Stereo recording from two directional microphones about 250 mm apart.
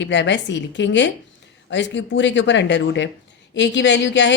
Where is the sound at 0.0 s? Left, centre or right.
Left.